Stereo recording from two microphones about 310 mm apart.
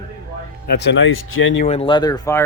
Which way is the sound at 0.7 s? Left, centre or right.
Left.